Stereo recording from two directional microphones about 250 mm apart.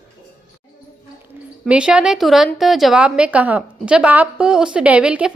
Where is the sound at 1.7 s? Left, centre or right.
Centre.